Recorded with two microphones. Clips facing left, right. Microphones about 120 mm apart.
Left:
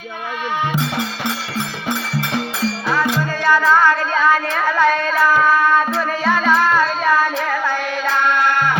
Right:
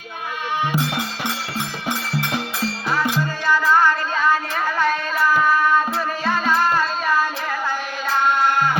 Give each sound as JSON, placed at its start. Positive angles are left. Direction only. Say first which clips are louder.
{"t": 3.4, "sound": "a sound", "louder": "left 3 dB", "side_deg": 90}
{"t": 6.2, "sound": "music", "louder": "left 4 dB", "side_deg": 90}
{"t": 8.0, "sound": "music", "louder": "even", "side_deg": 70}